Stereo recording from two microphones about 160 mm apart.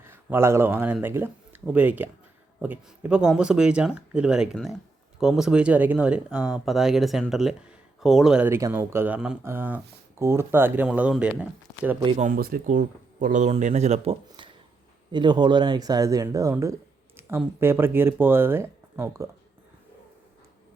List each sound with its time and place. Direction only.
0.0 s speech: 15° right (ahead or behind)
8.4 s speech: 15° right (ahead or behind)
12.1 s speech: 50° right (ahead or behind)
12.4 s speech: 65° right (ahead or behind); by 19.3 s 15° right (ahead or behind)